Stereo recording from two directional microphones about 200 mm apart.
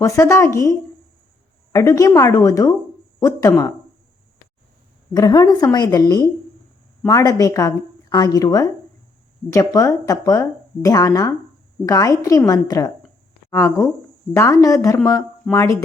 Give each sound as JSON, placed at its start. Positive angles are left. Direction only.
{"t": 0.0, "sound": "speech", "side_deg": 15}
{"t": 5.1, "sound": "a woman's voice", "side_deg": 20}